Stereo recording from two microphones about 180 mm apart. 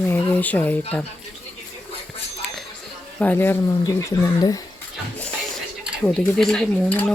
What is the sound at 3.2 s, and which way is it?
Speech, 10° left (ahead or behind).